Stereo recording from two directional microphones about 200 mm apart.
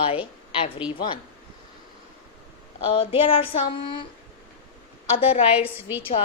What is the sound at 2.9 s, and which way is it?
Female singing, 25° left (ahead or behind).